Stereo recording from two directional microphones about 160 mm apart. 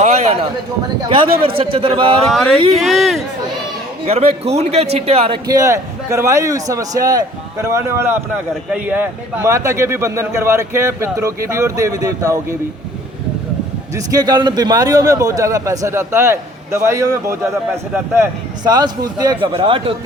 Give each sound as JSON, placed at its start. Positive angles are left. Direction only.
{"t": 0.0, "sound": "a sound", "side_deg": -45}
{"t": 1.0, "sound": "a man's voice", "side_deg": -30}
{"t": 2.3, "sound": "speech", "side_deg": 0}
{"t": 2.6, "sound": "a man's voice", "side_deg": -40}
{"t": 2.8, "sound": "speech", "side_deg": 0}
{"t": 4.0, "sound": "a man's voice", "side_deg": -40}
{"t": 5.5, "sound": "a man's voice", "side_deg": -20}
{"t": 13.9, "sound": "a man's voice", "side_deg": -25}
{"t": 18.6, "sound": "a man's voice", "side_deg": -25}